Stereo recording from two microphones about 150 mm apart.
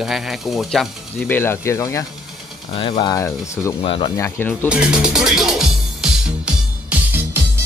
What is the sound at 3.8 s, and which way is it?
Speech, 35° left (ahead or behind).